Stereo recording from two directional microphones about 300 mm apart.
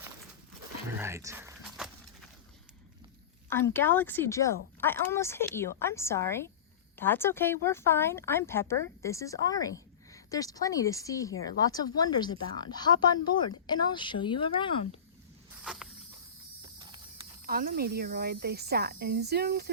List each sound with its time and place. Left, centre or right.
0.9 s a sound: centre
3.5 s a woman's voice: centre
15.6 s insect: centre
16.7 s mechanisms: centre
17.4 s speech: right